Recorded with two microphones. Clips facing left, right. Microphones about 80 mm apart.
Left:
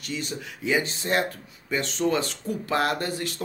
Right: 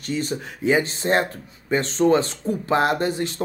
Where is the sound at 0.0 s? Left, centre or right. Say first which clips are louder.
Right 7 dB; right.